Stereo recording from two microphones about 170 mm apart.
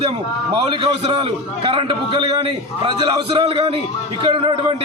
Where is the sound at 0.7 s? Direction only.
30° right (ahead or behind).